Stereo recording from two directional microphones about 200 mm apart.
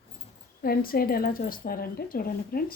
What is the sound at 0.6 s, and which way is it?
Speech, 50° left (ahead or behind).